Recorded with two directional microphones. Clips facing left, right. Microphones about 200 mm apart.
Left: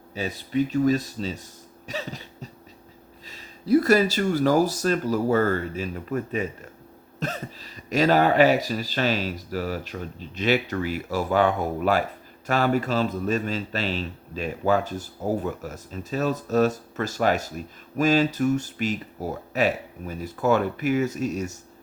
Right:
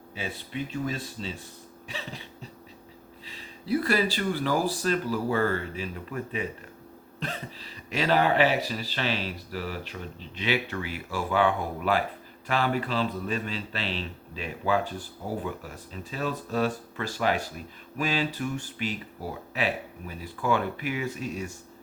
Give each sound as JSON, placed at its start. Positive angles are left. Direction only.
{"t": 0.1, "sound": "speech", "side_deg": 40}
{"t": 1.9, "sound": "cough", "side_deg": 40}
{"t": 3.2, "sound": "a man's voice", "side_deg": 45}